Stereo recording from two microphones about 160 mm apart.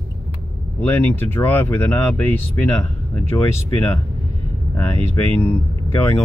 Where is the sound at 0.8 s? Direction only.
15° left (ahead or behind).